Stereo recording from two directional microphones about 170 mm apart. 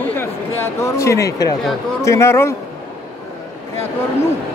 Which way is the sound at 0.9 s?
15° left (ahead or behind).